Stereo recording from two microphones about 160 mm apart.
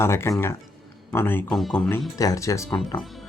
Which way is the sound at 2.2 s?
20° left (ahead or behind).